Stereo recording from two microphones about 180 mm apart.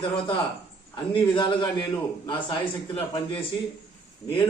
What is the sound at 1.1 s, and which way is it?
A man's voice, 25° left (ahead or behind).